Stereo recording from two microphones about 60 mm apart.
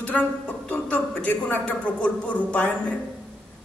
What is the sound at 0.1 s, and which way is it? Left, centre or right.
A woman's voice, centre.